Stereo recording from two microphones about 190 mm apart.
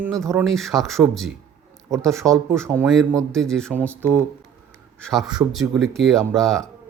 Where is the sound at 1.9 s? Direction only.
15° right (ahead or behind).